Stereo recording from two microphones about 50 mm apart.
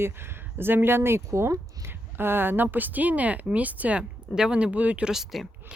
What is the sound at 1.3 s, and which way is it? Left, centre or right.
Speech, right.